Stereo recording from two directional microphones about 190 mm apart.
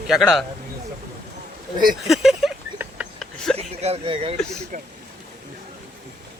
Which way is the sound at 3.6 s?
35° right (ahead or behind).